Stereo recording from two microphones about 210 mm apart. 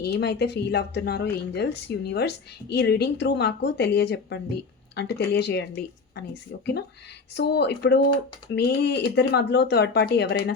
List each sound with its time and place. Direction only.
0.0 s speech: 50° left (ahead or behind)